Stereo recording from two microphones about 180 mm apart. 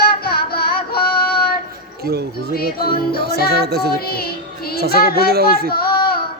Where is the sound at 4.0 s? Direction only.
60° left (ahead or behind).